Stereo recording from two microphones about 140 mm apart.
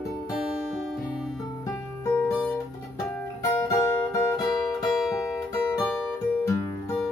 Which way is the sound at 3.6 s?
20° left (ahead or behind).